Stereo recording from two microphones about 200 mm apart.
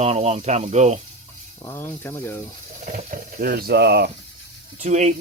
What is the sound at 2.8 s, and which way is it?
Speech, 40° right (ahead or behind).